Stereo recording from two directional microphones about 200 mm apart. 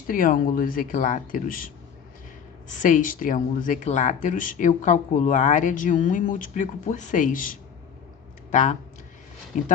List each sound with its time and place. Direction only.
0.1 s speech: 45° left (ahead or behind)